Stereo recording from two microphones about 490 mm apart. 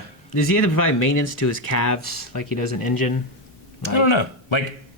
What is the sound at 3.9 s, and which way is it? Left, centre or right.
Speech, left.